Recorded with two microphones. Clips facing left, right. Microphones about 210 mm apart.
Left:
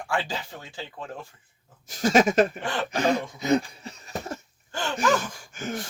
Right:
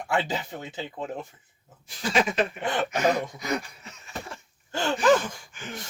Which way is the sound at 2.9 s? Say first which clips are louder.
Left 3 dB; 30° left (ahead or behind).